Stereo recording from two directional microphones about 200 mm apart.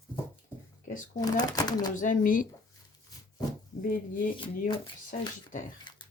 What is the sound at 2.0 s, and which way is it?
Speech, 40° left (ahead or behind).